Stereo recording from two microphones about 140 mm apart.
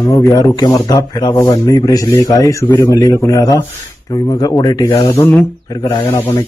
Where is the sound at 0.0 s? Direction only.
20° left (ahead or behind).